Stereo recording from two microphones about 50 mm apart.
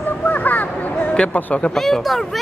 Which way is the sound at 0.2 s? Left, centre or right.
Left.